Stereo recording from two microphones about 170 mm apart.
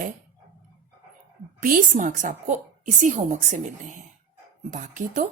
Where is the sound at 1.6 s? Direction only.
55° right (ahead or behind).